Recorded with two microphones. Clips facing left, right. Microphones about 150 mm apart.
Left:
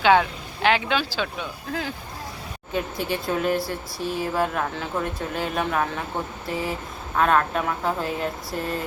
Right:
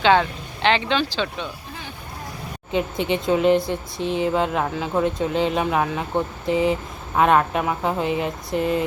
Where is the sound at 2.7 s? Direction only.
20° right (ahead or behind).